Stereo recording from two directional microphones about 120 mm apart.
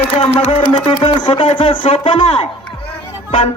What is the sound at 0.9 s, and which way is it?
Speech, 40° left (ahead or behind).